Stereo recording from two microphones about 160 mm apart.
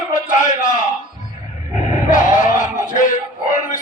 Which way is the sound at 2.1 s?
50° left (ahead or behind).